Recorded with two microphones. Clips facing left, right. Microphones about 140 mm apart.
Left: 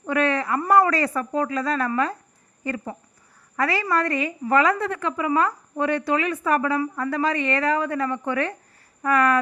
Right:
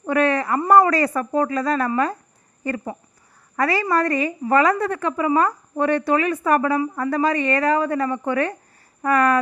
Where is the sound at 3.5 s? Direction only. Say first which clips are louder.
Right 3 dB; 40° right (ahead or behind).